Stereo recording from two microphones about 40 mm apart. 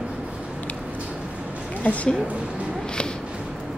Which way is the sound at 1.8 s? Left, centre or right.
Left.